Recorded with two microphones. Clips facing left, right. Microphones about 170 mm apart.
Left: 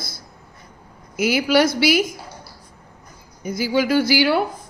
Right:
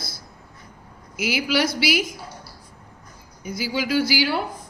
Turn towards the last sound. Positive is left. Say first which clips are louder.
# left 4 dB
turn(degrees=60)  # may be behind; listen again after turning